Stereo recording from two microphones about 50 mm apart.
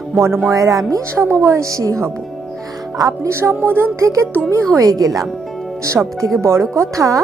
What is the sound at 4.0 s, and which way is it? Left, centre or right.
Speech, right.